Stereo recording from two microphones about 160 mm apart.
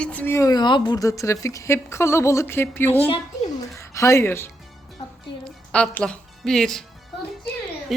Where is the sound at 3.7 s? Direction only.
20° left (ahead or behind); by 6.8 s 5° left (ahead or behind).